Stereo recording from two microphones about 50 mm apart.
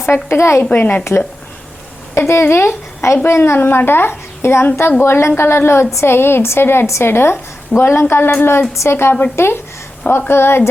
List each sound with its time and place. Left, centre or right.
0.0 s a woman's voice: left
0.6 s speech: left
2.1 s a woman's voice: left